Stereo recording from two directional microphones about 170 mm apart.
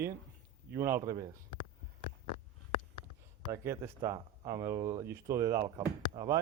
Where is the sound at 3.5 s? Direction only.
15° right (ahead or behind).